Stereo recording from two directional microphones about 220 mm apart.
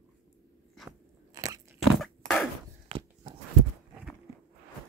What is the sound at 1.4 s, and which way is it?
Crunch, 15° right (ahead or behind).